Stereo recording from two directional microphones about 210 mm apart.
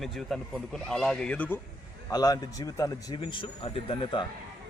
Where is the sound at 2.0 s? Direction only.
15° left (ahead or behind).